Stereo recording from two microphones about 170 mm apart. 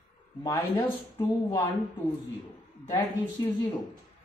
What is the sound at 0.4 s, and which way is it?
Speech, 15° left (ahead or behind).